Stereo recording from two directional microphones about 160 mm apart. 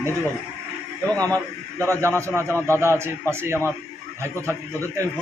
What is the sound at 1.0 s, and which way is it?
A man's voice, 20° right (ahead or behind).